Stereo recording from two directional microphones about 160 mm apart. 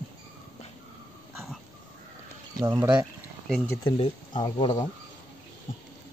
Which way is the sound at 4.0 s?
30° left (ahead or behind).